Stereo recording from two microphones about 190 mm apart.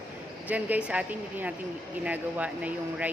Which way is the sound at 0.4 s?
10° right (ahead or behind).